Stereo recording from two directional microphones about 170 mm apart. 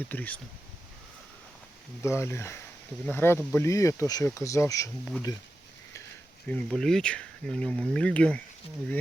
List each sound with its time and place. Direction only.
0.1 s speech: 10° left (ahead or behind)
2.0 s speech: 15° left (ahead or behind)
6.5 s speech: 5° left (ahead or behind)